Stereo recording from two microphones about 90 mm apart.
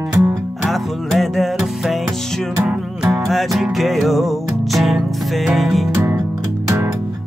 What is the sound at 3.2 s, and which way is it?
Music, centre (ahead or behind).